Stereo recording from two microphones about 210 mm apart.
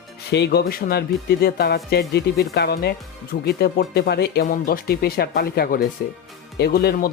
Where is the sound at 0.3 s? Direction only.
55° left (ahead or behind).